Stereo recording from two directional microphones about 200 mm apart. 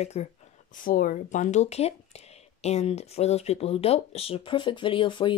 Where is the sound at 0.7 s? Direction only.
45° left (ahead or behind).